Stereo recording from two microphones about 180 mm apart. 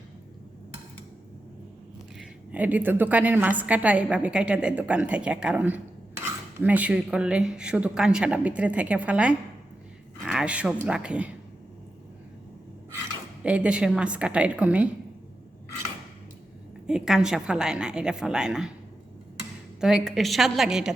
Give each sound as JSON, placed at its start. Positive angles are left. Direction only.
{"t": 2.1, "sound": "a woman's voice", "side_deg": -10}
{"t": 13.4, "sound": "a woman's voice", "side_deg": -5}
{"t": 16.8, "sound": "a woman's voice", "side_deg": -5}
{"t": 19.8, "sound": "a woman's voice", "side_deg": 0}